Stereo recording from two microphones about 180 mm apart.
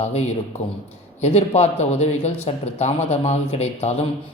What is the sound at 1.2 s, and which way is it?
Speech, 35° left (ahead or behind).